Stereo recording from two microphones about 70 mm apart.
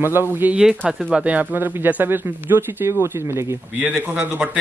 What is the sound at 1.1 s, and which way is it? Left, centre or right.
Speech, centre.